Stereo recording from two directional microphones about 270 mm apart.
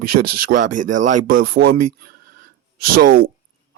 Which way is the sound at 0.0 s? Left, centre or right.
Right.